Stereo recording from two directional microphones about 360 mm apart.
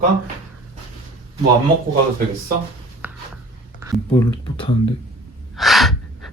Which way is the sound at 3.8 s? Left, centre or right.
Centre.